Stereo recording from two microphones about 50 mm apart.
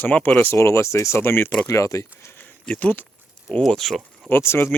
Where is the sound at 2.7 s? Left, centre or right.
Left.